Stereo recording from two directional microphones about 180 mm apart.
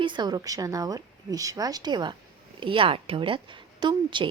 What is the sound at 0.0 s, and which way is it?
A woman's voice, 25° right (ahead or behind).